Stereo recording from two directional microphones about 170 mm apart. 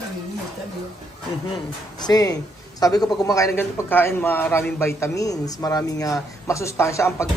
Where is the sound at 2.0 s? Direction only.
20° left (ahead or behind).